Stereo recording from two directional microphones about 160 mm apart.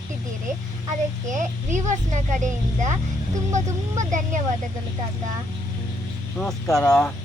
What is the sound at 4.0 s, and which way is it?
Speech, 50° right (ahead or behind).